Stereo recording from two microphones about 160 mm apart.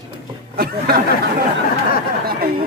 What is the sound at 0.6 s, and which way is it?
Speech, 75° right (ahead or behind).